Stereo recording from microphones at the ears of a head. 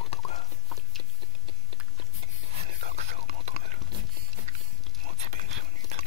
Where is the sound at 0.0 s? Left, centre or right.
Left.